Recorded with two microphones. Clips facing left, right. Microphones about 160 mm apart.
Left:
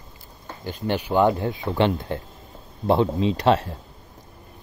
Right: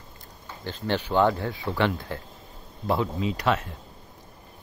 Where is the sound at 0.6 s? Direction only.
15° left (ahead or behind); by 3.7 s 30° left (ahead or behind).